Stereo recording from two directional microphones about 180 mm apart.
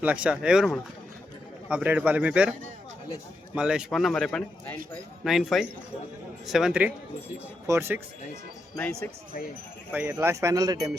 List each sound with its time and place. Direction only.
0.0 s a man's voice: 5° right (ahead or behind)
9.9 s speech: 10° right (ahead or behind)